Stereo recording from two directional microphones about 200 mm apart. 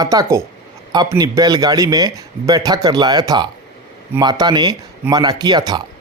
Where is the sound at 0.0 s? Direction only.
15° right (ahead or behind).